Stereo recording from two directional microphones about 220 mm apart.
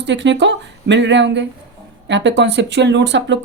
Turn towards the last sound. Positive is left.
turn(degrees=-55)  # may be behind; listen again after turning